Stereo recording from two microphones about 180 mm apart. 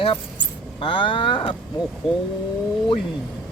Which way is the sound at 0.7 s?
30° left (ahead or behind).